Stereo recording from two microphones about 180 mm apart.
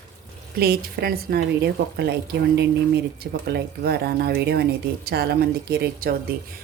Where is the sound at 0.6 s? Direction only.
60° right (ahead or behind).